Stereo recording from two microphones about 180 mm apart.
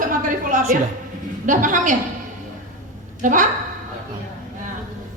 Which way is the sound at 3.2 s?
45° right (ahead or behind).